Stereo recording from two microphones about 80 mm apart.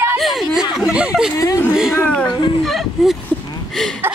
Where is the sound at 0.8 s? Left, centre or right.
Centre.